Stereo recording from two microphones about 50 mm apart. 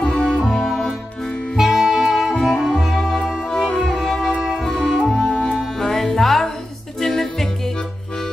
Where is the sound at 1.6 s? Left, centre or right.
Centre.